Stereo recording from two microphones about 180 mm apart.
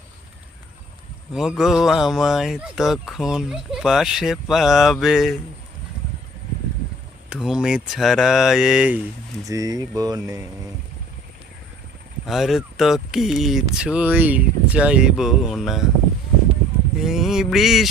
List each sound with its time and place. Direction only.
1.3 s speech: centre (ahead or behind)
7.3 s speech: centre (ahead or behind)
9.4 s speech: 20° right (ahead or behind)
12.2 s speech: centre (ahead or behind)
17.0 s speech: centre (ahead or behind)